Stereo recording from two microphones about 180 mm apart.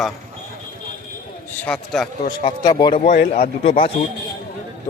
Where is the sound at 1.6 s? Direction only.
5° left (ahead or behind).